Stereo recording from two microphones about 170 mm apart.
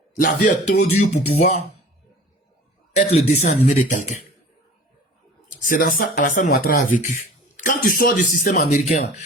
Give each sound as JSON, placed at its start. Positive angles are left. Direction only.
{"t": 0.2, "sound": "speech", "side_deg": 50}
{"t": 2.9, "sound": "speech", "side_deg": 40}
{"t": 5.5, "sound": "speech", "side_deg": 55}